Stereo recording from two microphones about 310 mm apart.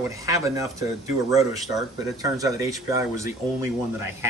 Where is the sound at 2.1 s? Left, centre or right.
Centre.